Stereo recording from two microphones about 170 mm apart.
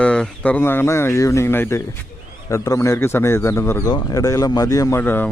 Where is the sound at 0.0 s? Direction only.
5° left (ahead or behind).